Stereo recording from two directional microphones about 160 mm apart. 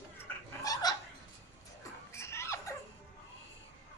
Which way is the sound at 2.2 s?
15° left (ahead or behind).